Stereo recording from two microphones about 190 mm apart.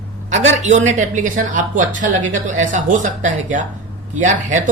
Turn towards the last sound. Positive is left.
turn(degrees=-40)  # may be behind; listen again after turning